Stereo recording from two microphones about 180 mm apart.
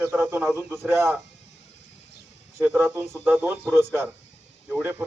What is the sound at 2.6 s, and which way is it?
Speech, 10° right (ahead or behind).